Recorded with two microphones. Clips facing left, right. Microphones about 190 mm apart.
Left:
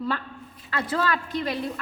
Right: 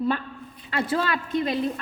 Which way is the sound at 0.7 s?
20° right (ahead or behind).